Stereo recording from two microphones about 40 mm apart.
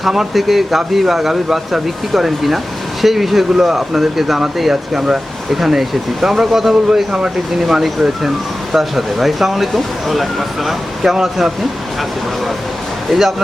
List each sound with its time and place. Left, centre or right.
0.1 s speech: centre
13.1 s speech: centre